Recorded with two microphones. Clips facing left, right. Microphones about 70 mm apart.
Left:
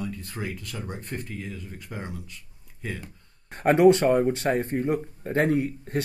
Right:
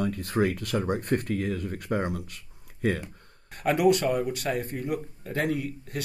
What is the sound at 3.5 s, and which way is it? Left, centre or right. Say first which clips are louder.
Speech: left 5 dB; left.